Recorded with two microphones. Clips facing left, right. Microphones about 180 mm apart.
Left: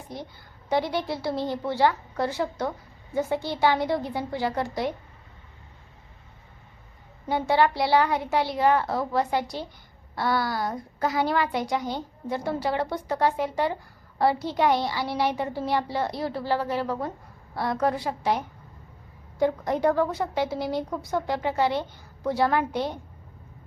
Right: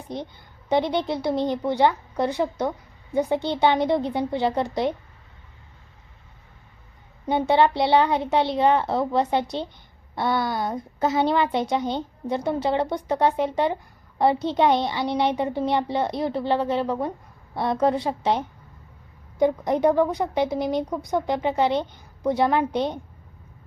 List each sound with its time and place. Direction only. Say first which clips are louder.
0.1 s speech: right 6 dB; 20° right (ahead or behind)
7.3 s speech: right 3 dB; 20° right (ahead or behind)